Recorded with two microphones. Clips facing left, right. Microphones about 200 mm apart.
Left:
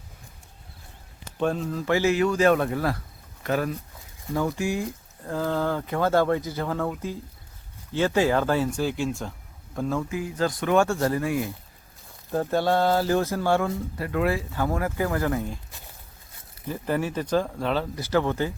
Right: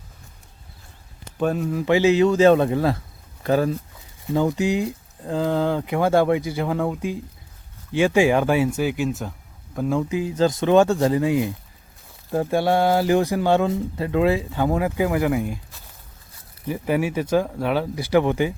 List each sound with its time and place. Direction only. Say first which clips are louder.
1.4 s speech: right 3 dB; 5° right (ahead or behind)
7.9 s speech: right 4 dB; 10° right (ahead or behind)
10.0 s speech: right 6 dB; 20° right (ahead or behind)
16.6 s speech: right 4 dB; 10° right (ahead or behind)